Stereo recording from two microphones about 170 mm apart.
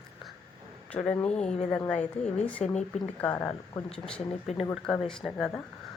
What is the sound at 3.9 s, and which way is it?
Speech, 5° left (ahead or behind).